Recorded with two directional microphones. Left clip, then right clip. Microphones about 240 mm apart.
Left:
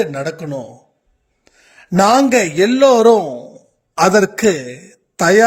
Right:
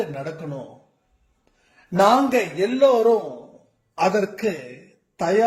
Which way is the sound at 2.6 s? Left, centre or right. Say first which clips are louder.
Left 6 dB; left.